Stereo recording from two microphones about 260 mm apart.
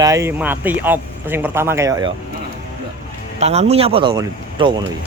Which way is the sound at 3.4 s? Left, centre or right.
Right.